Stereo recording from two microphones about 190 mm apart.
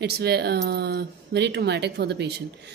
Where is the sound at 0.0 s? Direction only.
60° right (ahead or behind).